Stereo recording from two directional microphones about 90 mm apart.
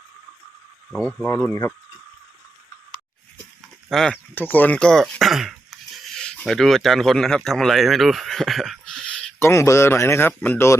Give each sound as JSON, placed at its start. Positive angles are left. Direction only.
{"t": 0.9, "sound": "speech", "side_deg": 5}
{"t": 1.5, "sound": "speech", "side_deg": 30}
{"t": 3.8, "sound": "speech", "side_deg": 5}
{"t": 4.4, "sound": "speech", "side_deg": 20}
{"t": 9.4, "sound": "speech", "side_deg": 30}